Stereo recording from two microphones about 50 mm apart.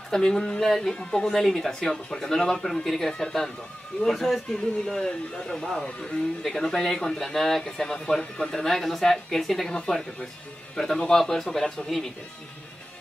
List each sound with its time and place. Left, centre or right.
0.1 s a man's voice: centre
8.6 s speech: centre